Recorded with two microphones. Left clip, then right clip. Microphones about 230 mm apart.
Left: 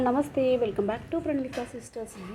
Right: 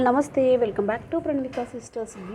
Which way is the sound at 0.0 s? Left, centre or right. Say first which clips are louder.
Right 5 dB; centre.